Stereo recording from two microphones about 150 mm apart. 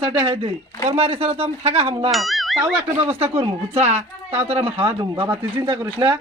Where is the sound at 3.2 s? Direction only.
40° right (ahead or behind).